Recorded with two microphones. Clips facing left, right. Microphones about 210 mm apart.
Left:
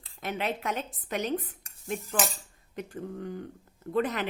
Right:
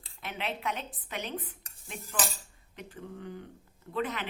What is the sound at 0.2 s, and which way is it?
A woman's voice, 45° left (ahead or behind).